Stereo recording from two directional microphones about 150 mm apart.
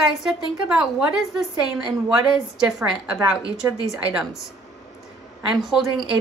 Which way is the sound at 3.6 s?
20° right (ahead or behind).